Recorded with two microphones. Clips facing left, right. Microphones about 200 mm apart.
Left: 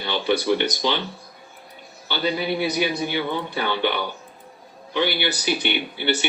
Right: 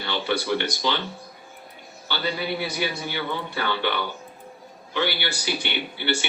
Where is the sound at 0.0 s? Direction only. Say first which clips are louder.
Left 4 dB; 15° left (ahead or behind).